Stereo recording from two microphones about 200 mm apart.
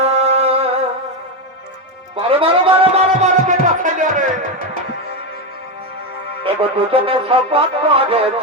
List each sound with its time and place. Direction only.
0.0 s music: 30° right (ahead or behind)
2.1 s music: 25° right (ahead or behind)
6.4 s speech: 25° right (ahead or behind)